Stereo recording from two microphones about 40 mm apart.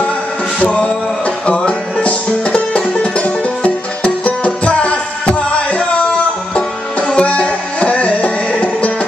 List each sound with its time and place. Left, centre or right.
0.6 s music: left
7.2 s music: left